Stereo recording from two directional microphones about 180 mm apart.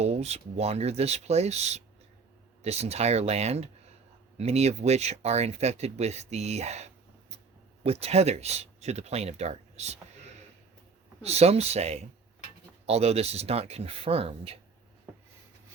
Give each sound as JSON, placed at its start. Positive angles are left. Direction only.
{"t": 0.0, "sound": "speech", "side_deg": -35}
{"t": 11.2, "sound": "speech", "side_deg": -35}